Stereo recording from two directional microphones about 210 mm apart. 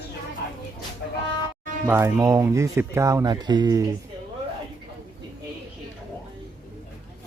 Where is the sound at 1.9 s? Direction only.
10° right (ahead or behind).